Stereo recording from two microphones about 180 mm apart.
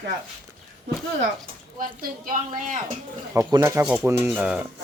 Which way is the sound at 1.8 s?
50° right (ahead or behind).